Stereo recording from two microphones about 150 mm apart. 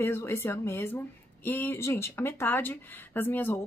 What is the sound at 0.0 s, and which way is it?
A woman's voice, 15° left (ahead or behind).